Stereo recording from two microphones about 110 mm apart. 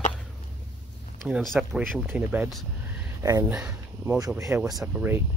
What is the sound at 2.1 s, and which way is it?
Speech, 15° right (ahead or behind).